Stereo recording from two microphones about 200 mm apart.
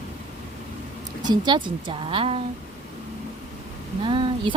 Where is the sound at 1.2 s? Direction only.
20° right (ahead or behind).